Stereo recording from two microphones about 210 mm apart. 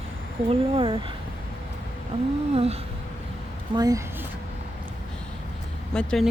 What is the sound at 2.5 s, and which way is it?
Speech, 30° right (ahead or behind).